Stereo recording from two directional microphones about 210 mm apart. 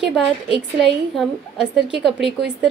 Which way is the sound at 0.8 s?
Centre (ahead or behind).